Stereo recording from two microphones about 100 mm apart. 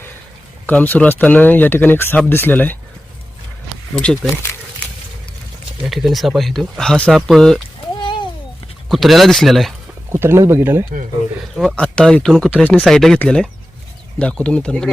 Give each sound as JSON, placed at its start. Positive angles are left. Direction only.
{"t": 0.7, "sound": "speech", "side_deg": 15}
{"t": 3.9, "sound": "speech", "side_deg": 10}
{"t": 5.8, "sound": "speech", "side_deg": 0}
{"t": 7.9, "sound": "a sound", "side_deg": 50}
{"t": 8.9, "sound": "speech", "side_deg": 0}
{"t": 10.1, "sound": "speech", "side_deg": -25}
{"t": 11.5, "sound": "speech", "side_deg": 5}